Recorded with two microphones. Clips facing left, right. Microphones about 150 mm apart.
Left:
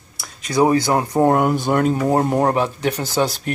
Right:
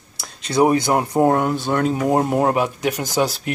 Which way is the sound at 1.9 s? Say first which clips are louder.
Left 1 dB; 10° right (ahead or behind).